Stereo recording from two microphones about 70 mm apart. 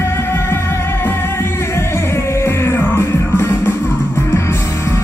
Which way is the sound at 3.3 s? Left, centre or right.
Left.